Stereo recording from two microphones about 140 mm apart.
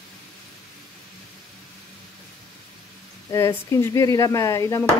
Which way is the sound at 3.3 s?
20° left (ahead or behind).